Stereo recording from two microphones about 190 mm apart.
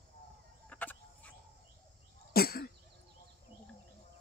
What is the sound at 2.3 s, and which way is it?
Cough, 55° left (ahead or behind).